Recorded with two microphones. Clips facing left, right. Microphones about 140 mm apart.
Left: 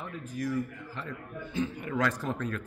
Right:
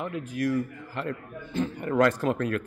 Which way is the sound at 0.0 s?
75° right (ahead or behind).